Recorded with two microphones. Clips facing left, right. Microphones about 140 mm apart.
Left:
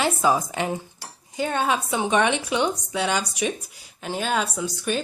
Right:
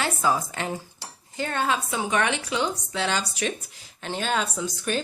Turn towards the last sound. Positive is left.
turn(degrees=5)  # may be behind; listen again after turning